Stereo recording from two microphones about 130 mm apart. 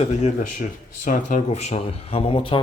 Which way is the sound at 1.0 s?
75° left (ahead or behind).